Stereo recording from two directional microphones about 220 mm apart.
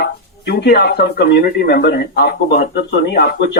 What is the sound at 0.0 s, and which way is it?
Speech, 50° left (ahead or behind).